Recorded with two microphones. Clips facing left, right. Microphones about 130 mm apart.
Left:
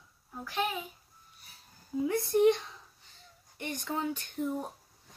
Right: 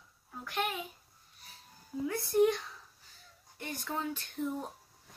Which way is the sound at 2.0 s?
20° left (ahead or behind).